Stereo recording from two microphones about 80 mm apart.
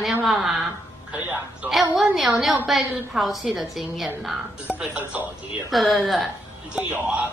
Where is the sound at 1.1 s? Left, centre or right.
Right.